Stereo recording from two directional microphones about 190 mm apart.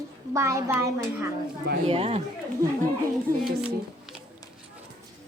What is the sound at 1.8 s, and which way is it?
Speech, 30° right (ahead or behind).